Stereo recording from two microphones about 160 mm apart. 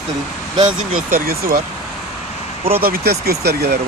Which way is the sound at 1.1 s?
65° right (ahead or behind).